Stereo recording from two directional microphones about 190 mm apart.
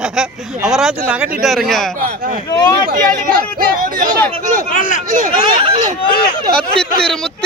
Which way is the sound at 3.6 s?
45° right (ahead or behind).